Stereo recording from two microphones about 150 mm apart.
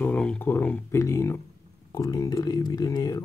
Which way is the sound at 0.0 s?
5° left (ahead or behind).